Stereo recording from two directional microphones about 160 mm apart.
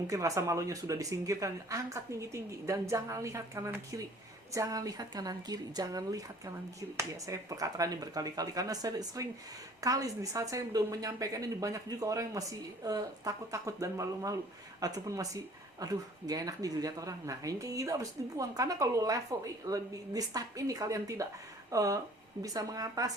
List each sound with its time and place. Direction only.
0.1 s speech: 20° right (ahead or behind)